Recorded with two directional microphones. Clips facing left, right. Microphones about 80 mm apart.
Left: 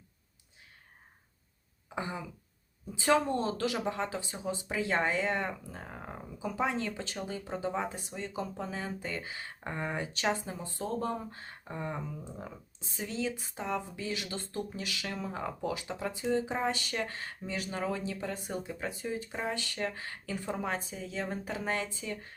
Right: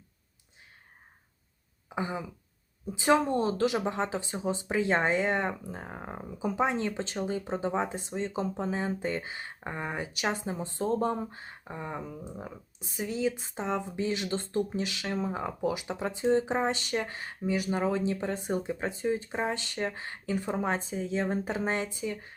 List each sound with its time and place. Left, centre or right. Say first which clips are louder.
2.0 s speech: right 4 dB; centre